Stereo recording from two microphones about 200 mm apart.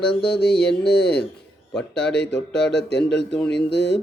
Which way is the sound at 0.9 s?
55° left (ahead or behind).